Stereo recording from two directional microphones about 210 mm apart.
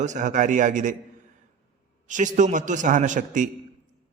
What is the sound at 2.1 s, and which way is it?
A man's voice, 35° right (ahead or behind).